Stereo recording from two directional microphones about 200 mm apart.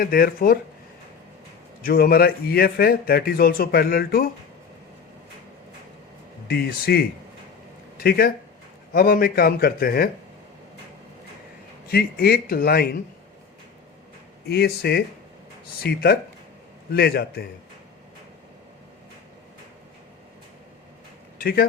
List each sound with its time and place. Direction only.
0.0 s speech: 45° left (ahead or behind)
1.8 s speech: 50° left (ahead or behind)
6.5 s speech: 50° left (ahead or behind)
11.9 s speech: 50° left (ahead or behind)
14.4 s speech: 50° left (ahead or behind)
21.3 s a sound: 50° left (ahead or behind)